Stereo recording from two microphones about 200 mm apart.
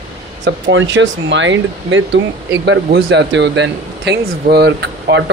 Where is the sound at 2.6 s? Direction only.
60° right (ahead or behind).